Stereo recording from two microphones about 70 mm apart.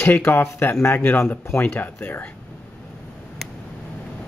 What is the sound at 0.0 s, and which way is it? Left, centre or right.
Speech, left.